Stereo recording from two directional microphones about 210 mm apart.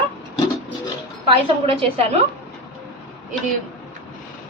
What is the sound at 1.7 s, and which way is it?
Speech, 25° right (ahead or behind).